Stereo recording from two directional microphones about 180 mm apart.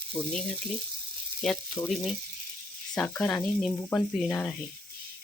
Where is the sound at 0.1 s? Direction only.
20° left (ahead or behind).